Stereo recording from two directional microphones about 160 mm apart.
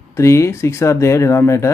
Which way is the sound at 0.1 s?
20° left (ahead or behind).